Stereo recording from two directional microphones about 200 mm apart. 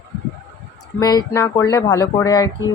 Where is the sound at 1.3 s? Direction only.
15° left (ahead or behind).